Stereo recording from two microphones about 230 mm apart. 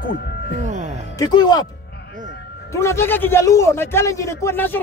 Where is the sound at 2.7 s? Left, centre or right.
Centre.